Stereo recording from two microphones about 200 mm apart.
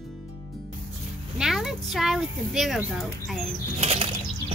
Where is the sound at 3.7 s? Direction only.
30° right (ahead or behind).